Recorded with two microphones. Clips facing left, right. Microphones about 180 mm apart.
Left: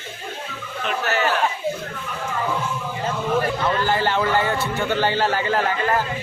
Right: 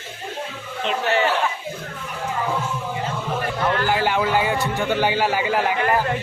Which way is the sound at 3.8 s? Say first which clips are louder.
Even; 10° right (ahead or behind).